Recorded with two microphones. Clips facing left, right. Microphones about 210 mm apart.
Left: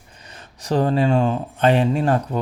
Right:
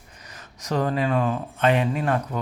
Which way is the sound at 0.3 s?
30° left (ahead or behind).